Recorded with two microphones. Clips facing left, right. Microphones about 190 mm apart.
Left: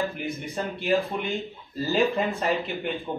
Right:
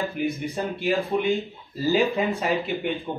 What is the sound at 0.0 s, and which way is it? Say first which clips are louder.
Speech: right 3 dB; centre (ahead or behind).